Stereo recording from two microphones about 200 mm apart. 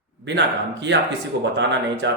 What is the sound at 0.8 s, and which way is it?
Speech, 60° right (ahead or behind).